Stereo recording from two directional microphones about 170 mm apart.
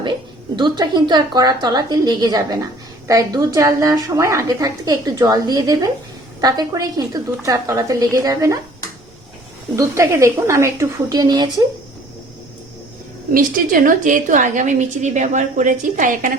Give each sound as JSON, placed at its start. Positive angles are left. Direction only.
{"t": 0.0, "sound": "a woman's voice", "side_deg": -25}
{"t": 9.7, "sound": "a woman's voice", "side_deg": -15}
{"t": 13.3, "sound": "a woman's voice", "side_deg": -55}